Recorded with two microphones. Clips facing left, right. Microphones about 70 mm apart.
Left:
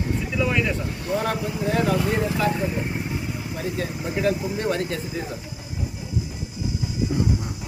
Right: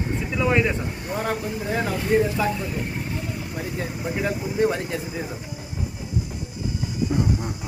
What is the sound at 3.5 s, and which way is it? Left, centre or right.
Speech, centre.